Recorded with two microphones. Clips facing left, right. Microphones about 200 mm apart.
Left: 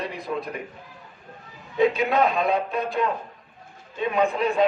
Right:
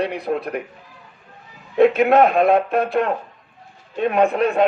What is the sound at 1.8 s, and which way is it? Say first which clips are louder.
A man's voice: right 7 dB; 60° right (ahead or behind).